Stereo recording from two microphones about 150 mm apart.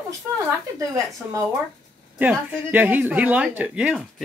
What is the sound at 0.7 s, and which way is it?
A woman's voice, 20° right (ahead or behind).